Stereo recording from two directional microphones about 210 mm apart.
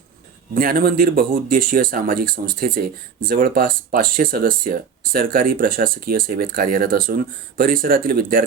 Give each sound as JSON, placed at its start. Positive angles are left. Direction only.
{"t": 0.5, "sound": "speech", "side_deg": -45}